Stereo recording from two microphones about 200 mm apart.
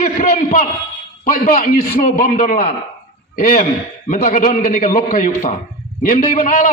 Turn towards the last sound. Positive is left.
turn(degrees=45)  # may be behind; listen again after turning